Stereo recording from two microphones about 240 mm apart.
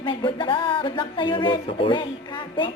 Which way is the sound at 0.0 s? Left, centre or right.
Centre.